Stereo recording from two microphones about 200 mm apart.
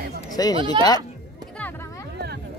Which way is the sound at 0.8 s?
20° right (ahead or behind).